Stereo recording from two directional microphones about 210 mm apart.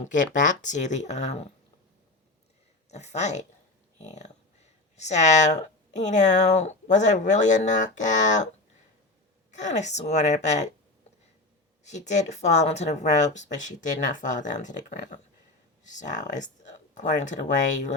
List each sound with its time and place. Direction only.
0.0 s speech: 35° left (ahead or behind)
2.9 s speech: 30° left (ahead or behind)
9.5 s speech: 35° left (ahead or behind)
11.9 s speech: 30° left (ahead or behind)